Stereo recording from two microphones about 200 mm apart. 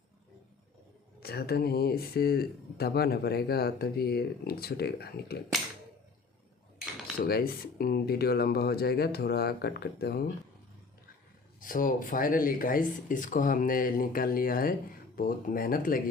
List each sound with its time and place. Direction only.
1.2 s speech: 50° left (ahead or behind)
7.3 s speech: 50° left (ahead or behind)
11.6 s speech: 45° left (ahead or behind)